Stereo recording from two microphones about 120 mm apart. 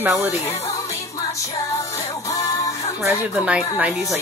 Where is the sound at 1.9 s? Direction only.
30° left (ahead or behind).